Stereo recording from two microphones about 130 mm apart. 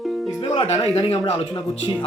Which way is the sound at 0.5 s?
50° left (ahead or behind).